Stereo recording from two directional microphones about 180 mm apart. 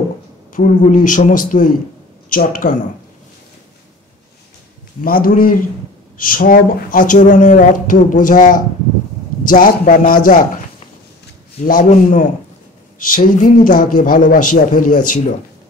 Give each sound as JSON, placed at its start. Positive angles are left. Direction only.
{"t": 0.5, "sound": "speech", "side_deg": 45}
{"t": 5.0, "sound": "speech", "side_deg": 55}
{"t": 11.6, "sound": "speech", "side_deg": 50}